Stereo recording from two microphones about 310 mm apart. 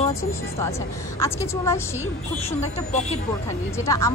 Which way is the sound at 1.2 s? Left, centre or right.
Centre.